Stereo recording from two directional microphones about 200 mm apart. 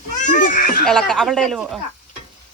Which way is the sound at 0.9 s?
Centre (ahead or behind).